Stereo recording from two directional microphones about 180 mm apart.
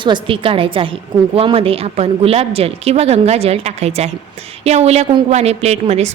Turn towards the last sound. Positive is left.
turn(degrees=-35)  # may be behind; listen again after turning